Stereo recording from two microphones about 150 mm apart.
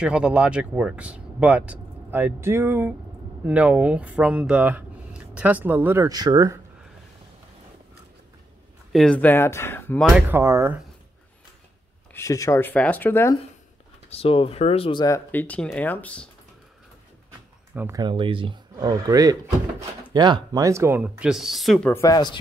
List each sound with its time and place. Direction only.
0.0 s speech: 5° right (ahead or behind); by 6.6 s 25° right (ahead or behind)
8.9 s speech: 5° left (ahead or behind)
9.9 s speech: centre (ahead or behind)
10.3 s speech: 20° right (ahead or behind)
12.1 s speech: 20° left (ahead or behind)
14.1 s speech: 40° left (ahead or behind)
15.0 s speech: 15° left (ahead or behind)
17.9 s speech: 30° right (ahead or behind)
21.0 s speech: 5° right (ahead or behind)
21.8 s speech: 20° left (ahead or behind)